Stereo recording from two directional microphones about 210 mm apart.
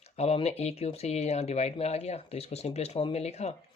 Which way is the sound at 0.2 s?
30° left (ahead or behind).